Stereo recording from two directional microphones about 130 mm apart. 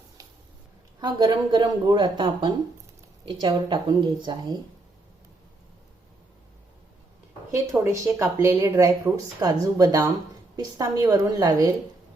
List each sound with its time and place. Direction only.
0.2 s a sound: 25° right (ahead or behind)
1.0 s a woman's voice: 35° right (ahead or behind)
7.5 s a woman's voice: 25° right (ahead or behind)